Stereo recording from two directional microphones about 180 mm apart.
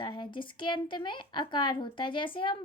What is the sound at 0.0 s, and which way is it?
A woman's voice, 25° left (ahead or behind).